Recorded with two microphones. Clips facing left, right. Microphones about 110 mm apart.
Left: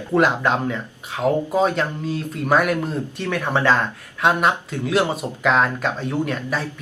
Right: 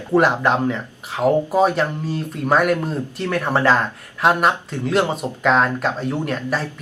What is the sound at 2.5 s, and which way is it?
Speech, centre (ahead or behind).